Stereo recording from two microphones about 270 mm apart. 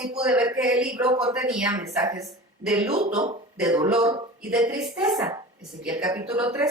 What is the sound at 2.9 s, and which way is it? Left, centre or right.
A woman's voice, right.